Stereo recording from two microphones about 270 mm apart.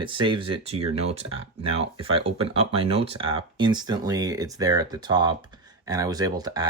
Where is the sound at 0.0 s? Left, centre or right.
Centre.